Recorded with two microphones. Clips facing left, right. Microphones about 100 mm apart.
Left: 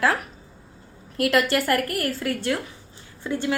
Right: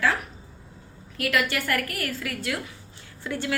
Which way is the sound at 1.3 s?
35° left (ahead or behind).